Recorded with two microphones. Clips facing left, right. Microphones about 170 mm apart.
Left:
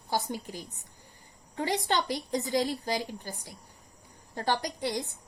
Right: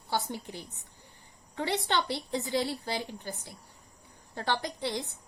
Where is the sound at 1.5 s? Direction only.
40° left (ahead or behind).